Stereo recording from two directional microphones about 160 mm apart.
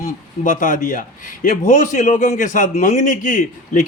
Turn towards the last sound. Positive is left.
turn(degrees=50)  # may be behind; listen again after turning